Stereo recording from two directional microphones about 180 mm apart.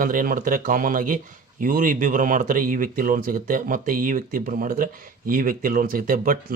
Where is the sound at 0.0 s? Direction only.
50° right (ahead or behind).